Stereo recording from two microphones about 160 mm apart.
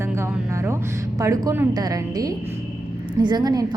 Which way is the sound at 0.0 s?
15° right (ahead or behind).